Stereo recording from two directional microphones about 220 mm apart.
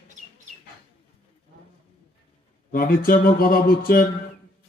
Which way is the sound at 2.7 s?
40° left (ahead or behind).